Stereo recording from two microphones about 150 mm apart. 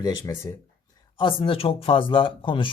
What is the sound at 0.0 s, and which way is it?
Speech, 25° left (ahead or behind).